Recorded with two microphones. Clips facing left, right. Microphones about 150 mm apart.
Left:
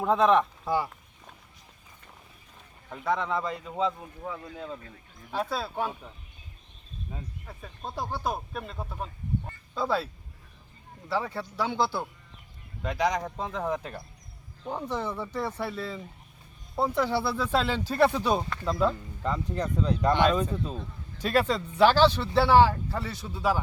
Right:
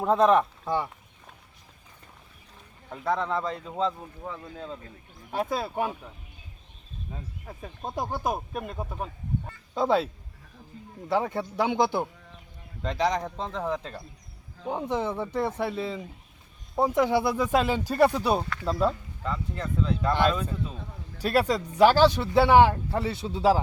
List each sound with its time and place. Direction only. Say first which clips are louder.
0.0 s speech: right 1 dB; centre (ahead or behind)
2.9 s speech: right 1 dB; centre (ahead or behind)
5.4 s speech: right 2 dB; 15° right (ahead or behind)
7.9 s a man's voice: right 2 dB; 20° right (ahead or behind)
11.1 s a man's voice: right 4 dB; 20° right (ahead or behind)
12.8 s speech: right 1 dB; 5° left (ahead or behind)
14.7 s a man's voice: right 3 dB; 20° right (ahead or behind); by 18.9 s 5° right (ahead or behind)
19.2 s speech: left 3 dB; 35° left (ahead or behind)
21.2 s a man's voice: right 1 dB; 10° right (ahead or behind); by 23.6 s 30° right (ahead or behind)